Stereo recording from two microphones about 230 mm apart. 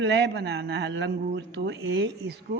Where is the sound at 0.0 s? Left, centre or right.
Right.